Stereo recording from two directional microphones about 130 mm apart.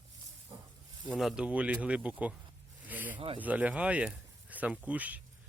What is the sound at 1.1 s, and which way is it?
Speech, centre (ahead or behind).